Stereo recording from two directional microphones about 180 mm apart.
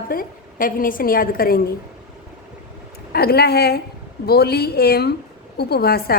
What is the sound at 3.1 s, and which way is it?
A woman's voice, 60° left (ahead or behind).